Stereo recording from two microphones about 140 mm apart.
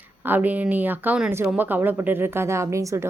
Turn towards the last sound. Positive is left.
turn(degrees=-25)  # may be behind; listen again after turning